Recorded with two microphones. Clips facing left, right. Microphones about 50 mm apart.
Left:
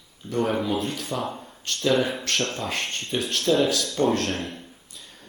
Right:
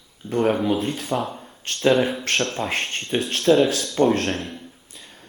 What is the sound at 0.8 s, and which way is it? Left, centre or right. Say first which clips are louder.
Speech: right 5 dB; right.